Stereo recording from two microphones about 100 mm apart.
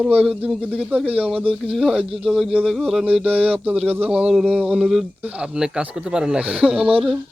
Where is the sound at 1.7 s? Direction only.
Centre (ahead or behind).